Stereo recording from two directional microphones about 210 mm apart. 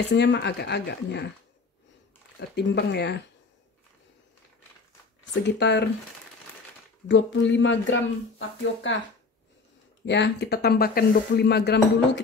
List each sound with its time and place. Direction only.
0.1 s speech: 55° left (ahead or behind)
2.5 s speech: 55° left (ahead or behind)
5.4 s speech: 55° left (ahead or behind)
7.1 s speech: 60° left (ahead or behind)
10.0 s speech: 55° left (ahead or behind)